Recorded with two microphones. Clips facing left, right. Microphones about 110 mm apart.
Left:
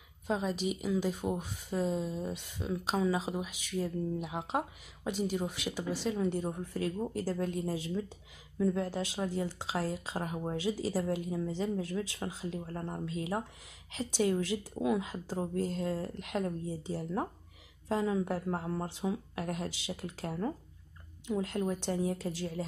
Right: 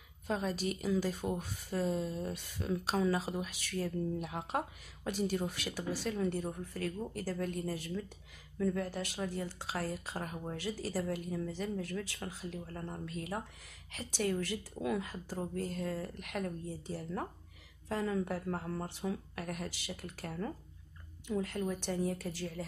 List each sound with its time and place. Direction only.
0.3 s speech: 15° left (ahead or behind)